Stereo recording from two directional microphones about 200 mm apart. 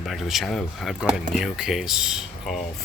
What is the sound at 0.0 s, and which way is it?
Speech, centre (ahead or behind).